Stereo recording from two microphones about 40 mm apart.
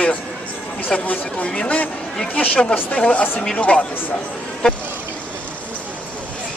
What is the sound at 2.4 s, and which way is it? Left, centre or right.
Speech, left.